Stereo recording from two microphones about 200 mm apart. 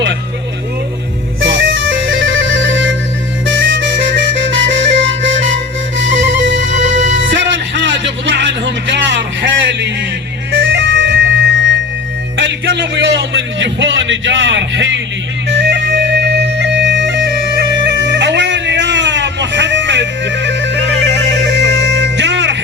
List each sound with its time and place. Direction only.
1.4 s music: 65° right (ahead or behind)
6.0 s music: 65° right (ahead or behind)
7.3 s a sound: 65° right (ahead or behind)
10.5 s music: 65° right (ahead or behind)
12.4 s a sound: 60° right (ahead or behind)
15.4 s music: 65° right (ahead or behind)